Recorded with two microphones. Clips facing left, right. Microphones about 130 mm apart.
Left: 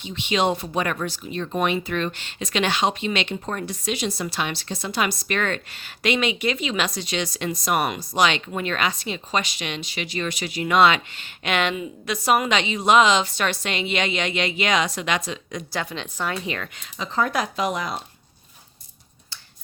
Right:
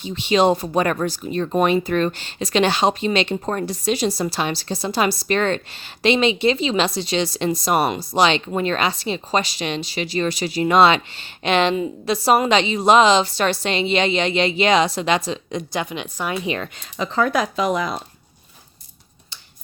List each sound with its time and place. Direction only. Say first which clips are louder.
0.0 s speech: right 6 dB; 35° right (ahead or behind)
15.7 s a woman's voice: right 1 dB; 20° right (ahead or behind)
17.0 s speech: right 4 dB; 75° right (ahead or behind)